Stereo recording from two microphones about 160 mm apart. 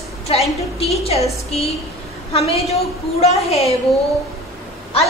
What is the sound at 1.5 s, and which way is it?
Speech, 40° left (ahead or behind).